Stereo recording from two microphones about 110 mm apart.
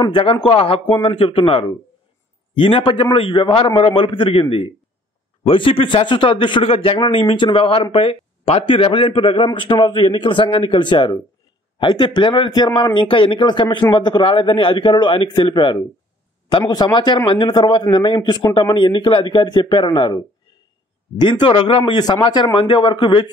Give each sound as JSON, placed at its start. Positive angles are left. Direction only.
{"t": 0.0, "sound": "a man's voice", "side_deg": 50}
{"t": 18.7, "sound": "a man's voice", "side_deg": 50}